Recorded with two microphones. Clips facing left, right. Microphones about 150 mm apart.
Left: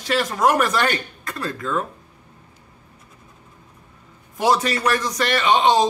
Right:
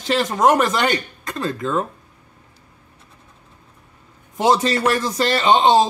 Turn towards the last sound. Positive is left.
turn(degrees=-25)  # may be behind; listen again after turning